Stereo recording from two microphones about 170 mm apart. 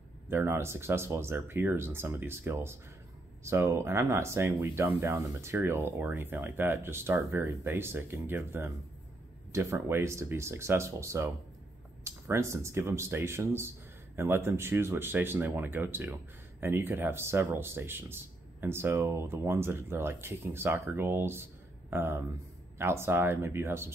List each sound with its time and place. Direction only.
0.3 s speech: 15° right (ahead or behind)